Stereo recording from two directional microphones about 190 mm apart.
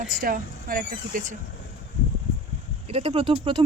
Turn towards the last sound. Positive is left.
turn(degrees=-30)  # may be behind; listen again after turning